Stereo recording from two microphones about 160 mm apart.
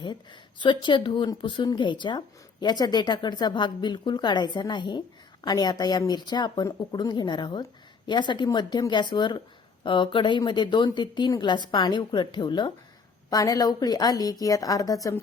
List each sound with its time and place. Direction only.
0.0 s a woman's voice: 30° left (ahead or behind)